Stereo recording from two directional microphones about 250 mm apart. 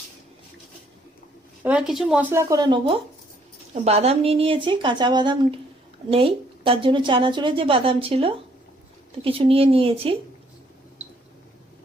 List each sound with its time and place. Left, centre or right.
1.6 s a woman's voice: centre; by 10.2 s right